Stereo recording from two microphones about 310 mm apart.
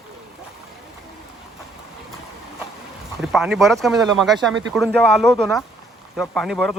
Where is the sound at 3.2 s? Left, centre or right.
Centre.